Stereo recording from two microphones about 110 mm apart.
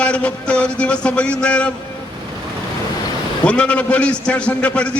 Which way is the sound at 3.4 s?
10° left (ahead or behind).